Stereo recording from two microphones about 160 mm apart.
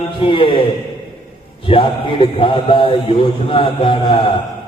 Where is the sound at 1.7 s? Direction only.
35° left (ahead or behind).